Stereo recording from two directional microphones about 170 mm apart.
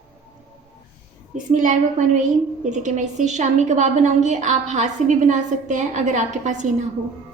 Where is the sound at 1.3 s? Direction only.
50° right (ahead or behind).